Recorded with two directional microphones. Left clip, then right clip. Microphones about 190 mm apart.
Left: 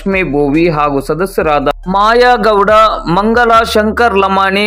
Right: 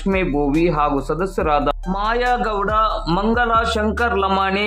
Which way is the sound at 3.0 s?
20° left (ahead or behind).